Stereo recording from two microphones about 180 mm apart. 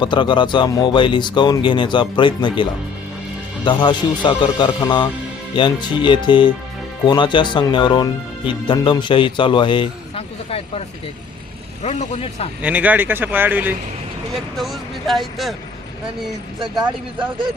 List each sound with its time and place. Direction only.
0.0 s speech: 25° left (ahead or behind)
12.6 s speech: 10° right (ahead or behind)
14.3 s speech: centre (ahead or behind)
16.6 s speech: 25° right (ahead or behind)